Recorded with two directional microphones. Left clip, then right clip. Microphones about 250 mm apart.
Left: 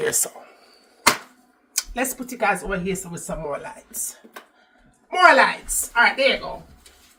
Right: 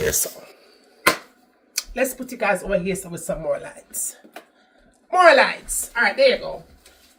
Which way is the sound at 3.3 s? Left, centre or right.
Right.